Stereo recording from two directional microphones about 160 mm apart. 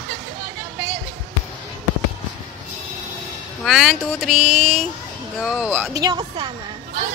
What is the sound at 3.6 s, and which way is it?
Speech, centre (ahead or behind).